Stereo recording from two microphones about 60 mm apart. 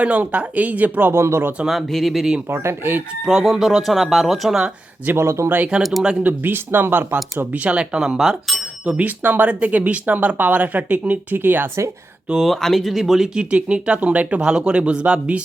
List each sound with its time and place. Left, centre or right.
0.0 s speech: right
1.1 s speech: right
1.6 s speech: centre
2.5 s speech: right
3.2 s speech: centre
5.1 s speech: right
5.8 s speech: centre
6.2 s speech: right; by 8.6 s centre
8.9 s speech: right
12.4 s speech: centre